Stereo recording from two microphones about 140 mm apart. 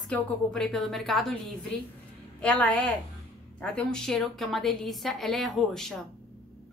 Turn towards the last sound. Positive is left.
turn(degrees=5)  # may be behind; listen again after turning